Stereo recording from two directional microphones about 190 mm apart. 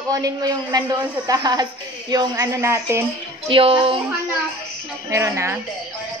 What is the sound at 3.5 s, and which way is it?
Speech, 30° right (ahead or behind).